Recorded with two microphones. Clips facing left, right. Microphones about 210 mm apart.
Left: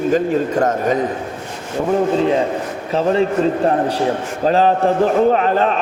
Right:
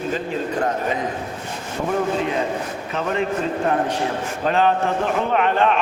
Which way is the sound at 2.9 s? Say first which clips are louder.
Left 8 dB; 30° left (ahead or behind).